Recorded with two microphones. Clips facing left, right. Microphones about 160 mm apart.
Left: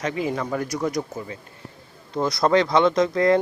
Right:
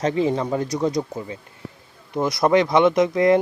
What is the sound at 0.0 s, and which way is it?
Speech, 30° right (ahead or behind).